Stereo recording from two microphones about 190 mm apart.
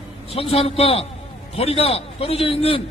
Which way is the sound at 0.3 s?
30° left (ahead or behind).